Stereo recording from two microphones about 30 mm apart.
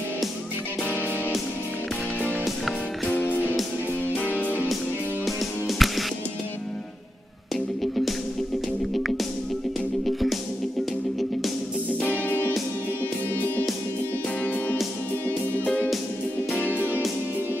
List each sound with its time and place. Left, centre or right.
2.4 s music: centre
4.3 s music: left
5.2 s music: centre
10.0 s music: centre
14.4 s music: left